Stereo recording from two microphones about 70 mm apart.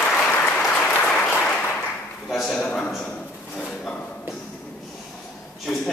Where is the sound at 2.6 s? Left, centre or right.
Centre.